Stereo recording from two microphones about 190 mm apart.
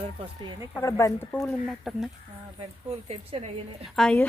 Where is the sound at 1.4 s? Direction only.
Centre (ahead or behind).